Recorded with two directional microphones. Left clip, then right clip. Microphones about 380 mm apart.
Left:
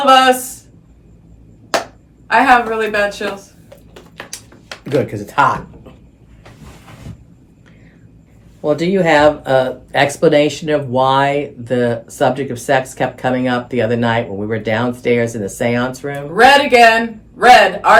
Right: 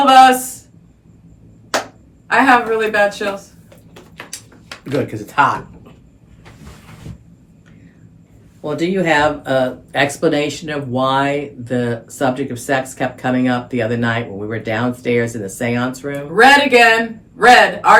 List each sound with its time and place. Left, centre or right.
0.0 s a man's voice: centre
2.2 s a man's voice: centre
4.2 s a sound: left
8.6 s speech: left
16.3 s a man's voice: centre